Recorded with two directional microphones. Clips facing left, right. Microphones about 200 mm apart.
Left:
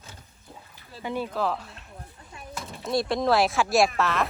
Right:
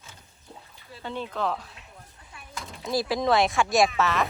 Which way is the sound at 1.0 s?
10° left (ahead or behind).